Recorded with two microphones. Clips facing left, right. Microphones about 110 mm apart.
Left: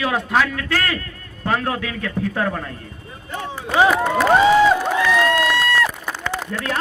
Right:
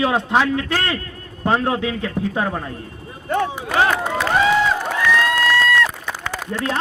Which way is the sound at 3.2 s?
60° right (ahead or behind).